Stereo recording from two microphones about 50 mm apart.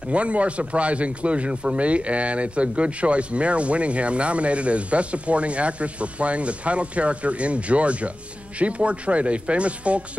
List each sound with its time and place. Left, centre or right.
0.1 s speech: right